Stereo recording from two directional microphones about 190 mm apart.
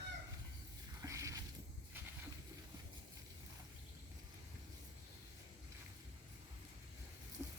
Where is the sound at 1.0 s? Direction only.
15° right (ahead or behind).